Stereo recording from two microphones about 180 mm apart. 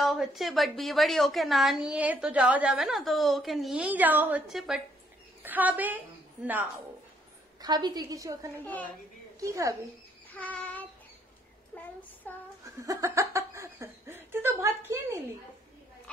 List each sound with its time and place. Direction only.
0.0 s a woman's voice: centre (ahead or behind)
7.6 s a woman's voice: 25° right (ahead or behind)
10.3 s child singing: 10° left (ahead or behind)
12.6 s laughter: 15° right (ahead or behind)